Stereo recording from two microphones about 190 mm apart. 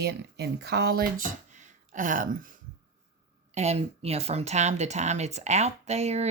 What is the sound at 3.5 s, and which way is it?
Speech, 35° right (ahead or behind).